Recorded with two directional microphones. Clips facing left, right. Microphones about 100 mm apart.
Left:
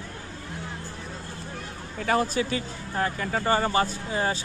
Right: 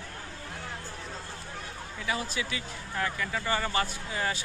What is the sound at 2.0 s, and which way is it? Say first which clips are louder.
Speech: left 9 dB; 50° left (ahead or behind).